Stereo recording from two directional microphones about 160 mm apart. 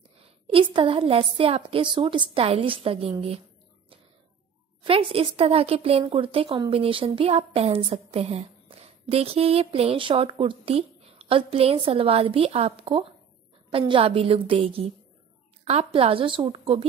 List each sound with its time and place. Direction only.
0.2 s a sound: 35° right (ahead or behind)
0.7 s speech: 35° right (ahead or behind)
4.8 s speech: 35° right (ahead or behind)